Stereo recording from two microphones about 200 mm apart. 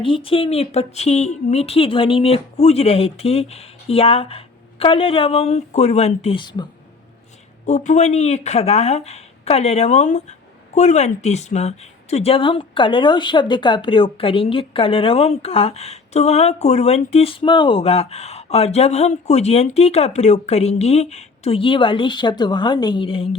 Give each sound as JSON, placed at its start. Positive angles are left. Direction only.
{"t": 0.0, "sound": "speech", "side_deg": 25}
{"t": 7.7, "sound": "speech", "side_deg": 35}